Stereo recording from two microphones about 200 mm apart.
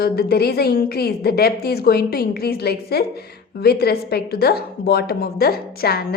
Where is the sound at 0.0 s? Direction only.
50° left (ahead or behind).